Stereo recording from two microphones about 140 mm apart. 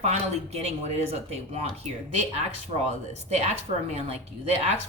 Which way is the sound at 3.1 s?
50° right (ahead or behind).